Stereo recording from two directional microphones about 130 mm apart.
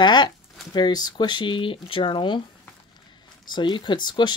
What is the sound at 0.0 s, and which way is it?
Speech, 35° left (ahead or behind).